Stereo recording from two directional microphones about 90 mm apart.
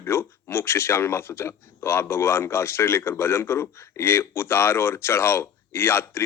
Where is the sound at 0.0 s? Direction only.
30° left (ahead or behind).